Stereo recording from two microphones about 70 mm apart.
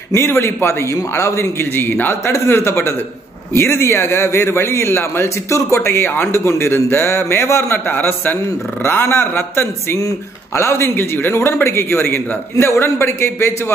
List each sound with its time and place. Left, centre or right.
0.1 s a man's voice: left
9.9 s a man's voice: left
11.1 s a man's voice: left